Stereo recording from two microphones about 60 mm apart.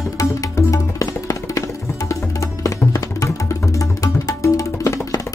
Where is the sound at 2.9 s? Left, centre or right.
Left.